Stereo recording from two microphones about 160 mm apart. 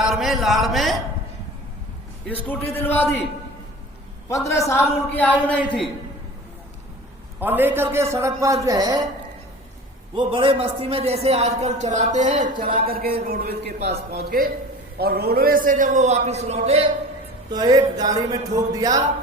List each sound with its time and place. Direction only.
0.0 s speech: centre (ahead or behind)
2.2 s a man's voice: 10° left (ahead or behind)
4.4 s a man's voice: 20° left (ahead or behind)
7.3 s a man's voice: 10° right (ahead or behind)
10.2 s a man's voice: 30° right (ahead or behind)
17.5 s speech: 25° right (ahead or behind)